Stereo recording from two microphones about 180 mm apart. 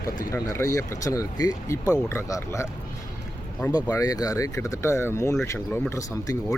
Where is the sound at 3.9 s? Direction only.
20° left (ahead or behind).